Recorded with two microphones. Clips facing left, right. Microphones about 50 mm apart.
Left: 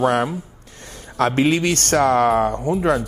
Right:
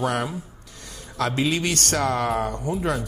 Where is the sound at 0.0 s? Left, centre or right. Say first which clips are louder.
Left 7 dB; left.